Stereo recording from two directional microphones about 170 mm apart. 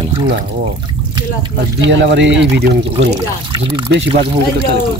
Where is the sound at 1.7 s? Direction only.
90° right.